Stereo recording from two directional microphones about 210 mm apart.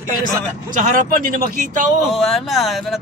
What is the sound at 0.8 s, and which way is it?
Speech, 40° right (ahead or behind).